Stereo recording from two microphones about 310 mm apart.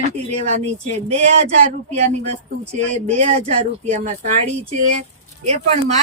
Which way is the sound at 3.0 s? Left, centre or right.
Right.